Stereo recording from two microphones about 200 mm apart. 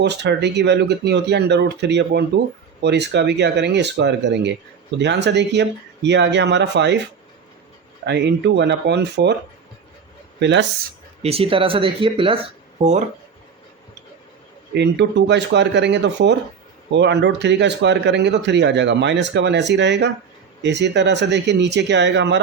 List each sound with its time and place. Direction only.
0.0 s speech: 60° right (ahead or behind)
8.0 s speech: 60° right (ahead or behind)
10.4 s speech: 60° right (ahead or behind)
11.2 s speech: 30° right (ahead or behind)
14.7 s speech: 60° right (ahead or behind)